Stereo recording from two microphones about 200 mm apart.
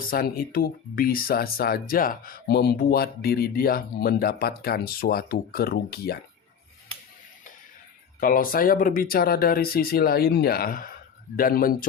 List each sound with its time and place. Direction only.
0.0 s speech: 45° left (ahead or behind)
8.2 s speech: 45° left (ahead or behind)